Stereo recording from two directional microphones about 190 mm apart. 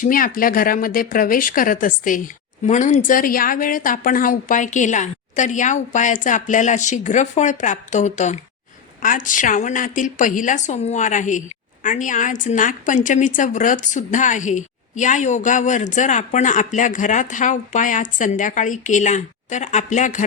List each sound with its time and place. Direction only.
0.0 s a woman's voice: 45° left (ahead or behind)